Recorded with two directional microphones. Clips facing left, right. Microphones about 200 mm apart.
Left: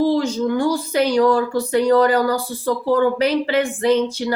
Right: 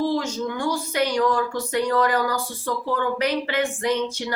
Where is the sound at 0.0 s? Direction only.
35° left (ahead or behind).